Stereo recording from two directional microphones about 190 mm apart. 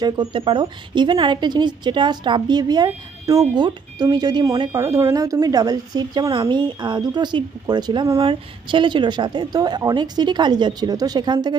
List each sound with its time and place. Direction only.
0.0 s a woman's voice: 25° right (ahead or behind)